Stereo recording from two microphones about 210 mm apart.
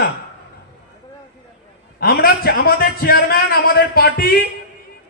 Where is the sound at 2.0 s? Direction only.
45° left (ahead or behind).